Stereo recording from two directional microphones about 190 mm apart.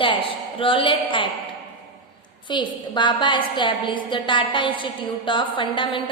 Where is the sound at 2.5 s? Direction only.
25° left (ahead or behind).